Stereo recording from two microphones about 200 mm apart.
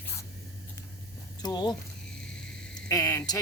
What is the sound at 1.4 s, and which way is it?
Speech, 20° left (ahead or behind).